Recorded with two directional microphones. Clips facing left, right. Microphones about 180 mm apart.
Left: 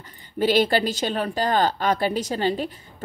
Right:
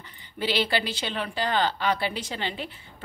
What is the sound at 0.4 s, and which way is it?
Speech, 45° left (ahead or behind).